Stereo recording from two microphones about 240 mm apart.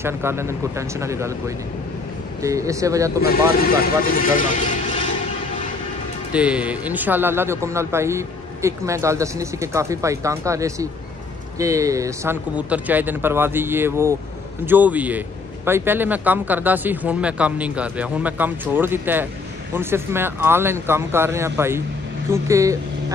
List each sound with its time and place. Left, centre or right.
0.0 s speech: centre
2.4 s speech: centre
3.8 s speech: left
6.3 s speech: centre